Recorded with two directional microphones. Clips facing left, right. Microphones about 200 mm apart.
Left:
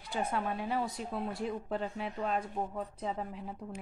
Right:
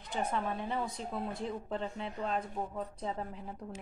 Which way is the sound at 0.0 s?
10° left (ahead or behind).